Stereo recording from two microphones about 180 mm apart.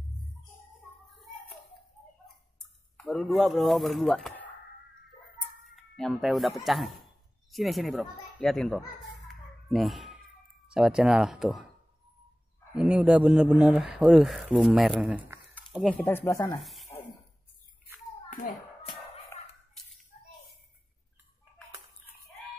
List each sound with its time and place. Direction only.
3.0 s a man's voice: centre (ahead or behind)
5.6 s a child's voice: centre (ahead or behind)
12.7 s a man's voice: 5° right (ahead or behind)
15.9 s speech: 10° left (ahead or behind)
16.6 s a sound: centre (ahead or behind)